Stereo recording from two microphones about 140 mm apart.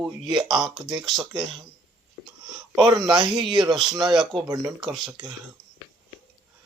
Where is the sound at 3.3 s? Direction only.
Centre (ahead or behind).